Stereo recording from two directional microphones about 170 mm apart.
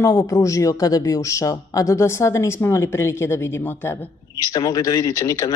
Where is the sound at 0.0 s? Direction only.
15° left (ahead or behind).